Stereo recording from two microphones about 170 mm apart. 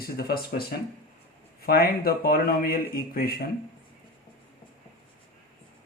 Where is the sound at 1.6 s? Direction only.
60° left (ahead or behind).